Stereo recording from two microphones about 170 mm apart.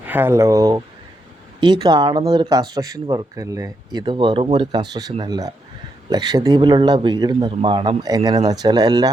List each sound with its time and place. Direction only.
0.0 s speech: 10° right (ahead or behind)